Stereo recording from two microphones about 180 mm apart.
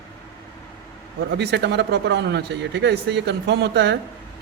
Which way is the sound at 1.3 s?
65° right (ahead or behind).